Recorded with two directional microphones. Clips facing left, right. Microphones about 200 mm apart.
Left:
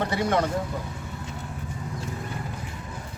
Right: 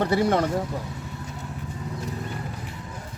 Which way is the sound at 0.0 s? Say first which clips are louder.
Right 3 dB; 35° right (ahead or behind).